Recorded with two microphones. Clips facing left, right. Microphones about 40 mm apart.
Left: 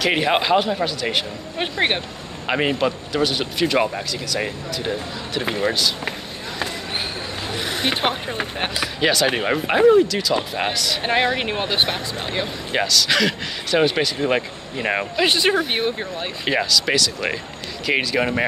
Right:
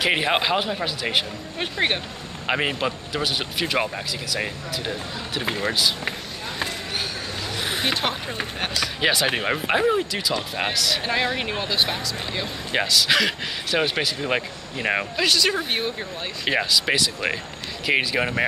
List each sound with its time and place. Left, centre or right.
0.1 s speech: centre
1.6 s speech: centre
2.4 s speech: centre
7.9 s speech: centre
9.0 s speech: centre
11.0 s speech: left
12.8 s speech: centre
15.2 s speech: left
16.5 s speech: centre